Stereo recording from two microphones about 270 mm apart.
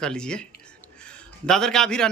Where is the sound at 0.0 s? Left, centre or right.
Centre.